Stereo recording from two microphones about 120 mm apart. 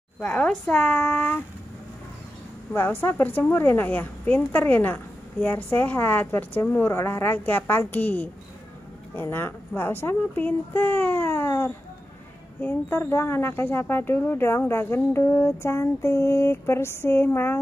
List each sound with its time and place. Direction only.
0.2 s a woman's voice: 10° left (ahead or behind)
2.7 s a woman's voice: 20° left (ahead or behind)